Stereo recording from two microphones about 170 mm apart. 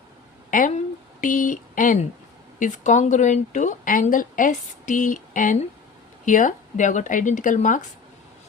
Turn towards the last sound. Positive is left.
turn(degrees=50)  # may be behind; listen again after turning